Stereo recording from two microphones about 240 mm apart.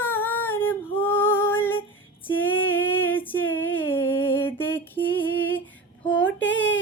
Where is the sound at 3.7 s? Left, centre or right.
Centre.